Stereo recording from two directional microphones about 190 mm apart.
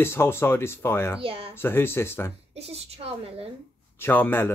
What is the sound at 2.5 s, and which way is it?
A woman's voice, 35° right (ahead or behind).